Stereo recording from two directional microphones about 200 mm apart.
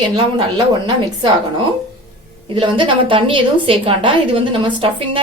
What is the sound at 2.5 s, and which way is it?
A woman's voice, 25° right (ahead or behind).